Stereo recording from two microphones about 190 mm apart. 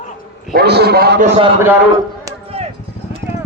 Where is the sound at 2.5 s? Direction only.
30° right (ahead or behind).